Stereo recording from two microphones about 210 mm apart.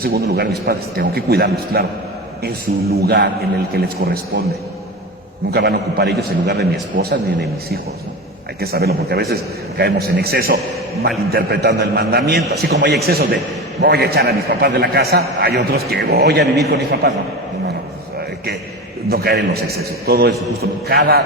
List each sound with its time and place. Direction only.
0.0 s a man's voice: 45° right (ahead or behind)
3.0 s a man's voice: 50° right (ahead or behind)
5.5 s a man's voice: 50° right (ahead or behind)
8.6 s a man's voice: 50° right (ahead or behind)
19.0 s a man's voice: 45° right (ahead or behind)